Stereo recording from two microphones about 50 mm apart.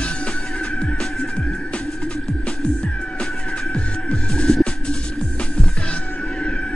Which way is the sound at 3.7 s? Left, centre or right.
Centre.